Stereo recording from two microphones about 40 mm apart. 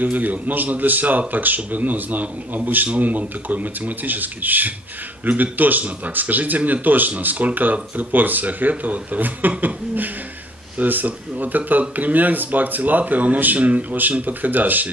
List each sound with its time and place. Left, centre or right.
0.0 s speech: right
10.8 s speech: right